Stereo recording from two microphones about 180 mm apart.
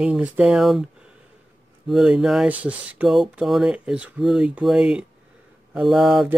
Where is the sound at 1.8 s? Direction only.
5° right (ahead or behind).